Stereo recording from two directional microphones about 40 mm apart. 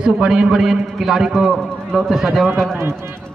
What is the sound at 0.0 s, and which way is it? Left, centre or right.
A man's voice, right.